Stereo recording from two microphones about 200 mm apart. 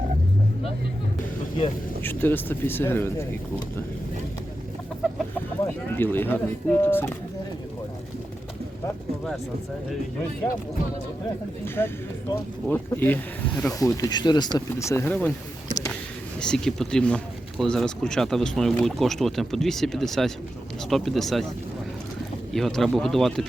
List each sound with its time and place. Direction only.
2.0 s speech: 10° left (ahead or behind)
6.0 s speech: 10° left (ahead or behind)
11.6 s speech: 10° left (ahead or behind)
12.6 s speech: 10° left (ahead or behind)
16.4 s speech: 5° left (ahead or behind)
22.5 s speech: centre (ahead or behind)